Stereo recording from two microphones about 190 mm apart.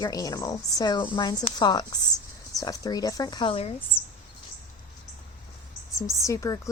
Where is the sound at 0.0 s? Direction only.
20° left (ahead or behind).